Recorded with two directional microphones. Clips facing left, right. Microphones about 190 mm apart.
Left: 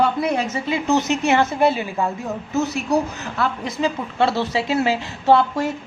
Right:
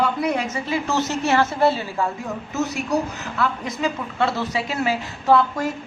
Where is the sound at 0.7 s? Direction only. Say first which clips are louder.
Left 5 dB; 20° left (ahead or behind).